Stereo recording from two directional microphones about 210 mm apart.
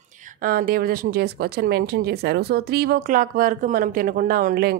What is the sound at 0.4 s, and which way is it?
Speech, 45° right (ahead or behind).